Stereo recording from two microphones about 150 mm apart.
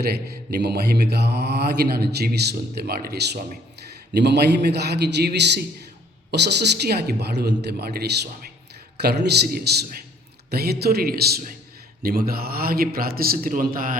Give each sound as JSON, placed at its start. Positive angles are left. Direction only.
{"t": 0.0, "sound": "mantra", "side_deg": -90}
{"t": 12.0, "sound": "a man's voice", "side_deg": -90}